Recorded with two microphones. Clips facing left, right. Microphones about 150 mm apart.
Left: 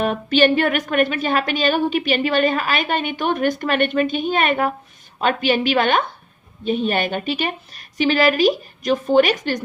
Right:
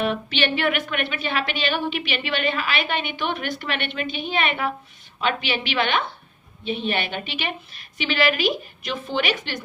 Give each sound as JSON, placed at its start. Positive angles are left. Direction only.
{"t": 0.0, "sound": "a woman's voice", "side_deg": 45}